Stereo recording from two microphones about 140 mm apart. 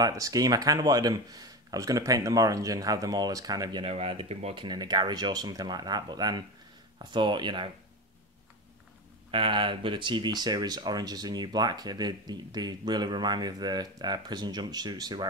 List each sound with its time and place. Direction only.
0.0 s speech: 25° right (ahead or behind)
3.8 s speech: 45° right (ahead or behind)
4.6 s speech: 30° right (ahead or behind)
9.3 s speech: 40° right (ahead or behind)